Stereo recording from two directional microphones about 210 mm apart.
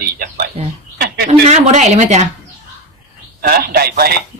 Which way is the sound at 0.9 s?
45° right (ahead or behind).